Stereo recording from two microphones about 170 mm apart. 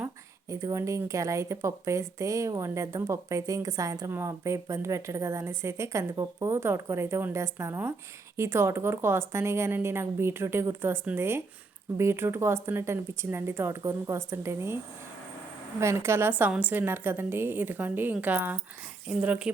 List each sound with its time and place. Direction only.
0.5 s speech: 20° right (ahead or behind)
15.8 s speech: 15° right (ahead or behind)